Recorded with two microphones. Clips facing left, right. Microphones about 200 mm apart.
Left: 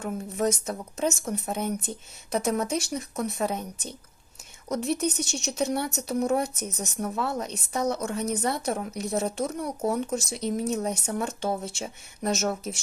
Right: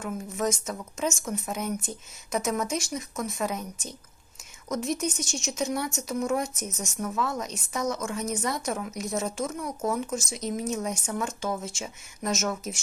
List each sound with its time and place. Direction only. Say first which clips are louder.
0.0 s a woman's voice: left 2 dB; 35° left (ahead or behind)